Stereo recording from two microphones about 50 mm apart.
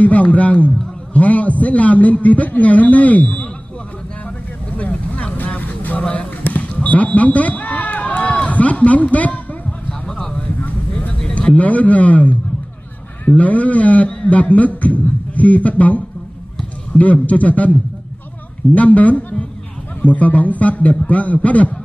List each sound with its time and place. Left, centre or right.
0.0 s a man's voice: left
4.7 s vehicle: left
6.4 s basketball bounce: left
11.3 s a man's voice: left
17.0 s a man's voice: left
18.8 s a man's voice: left